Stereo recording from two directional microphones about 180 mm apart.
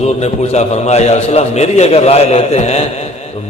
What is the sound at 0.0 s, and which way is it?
A man's voice, 35° left (ahead or behind).